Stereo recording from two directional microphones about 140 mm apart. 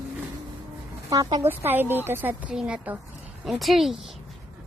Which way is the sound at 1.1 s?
25° right (ahead or behind).